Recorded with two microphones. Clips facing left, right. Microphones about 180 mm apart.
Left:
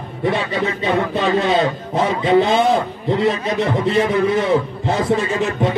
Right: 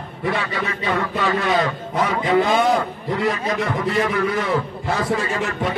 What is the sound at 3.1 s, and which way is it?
A man's voice, 25° left (ahead or behind).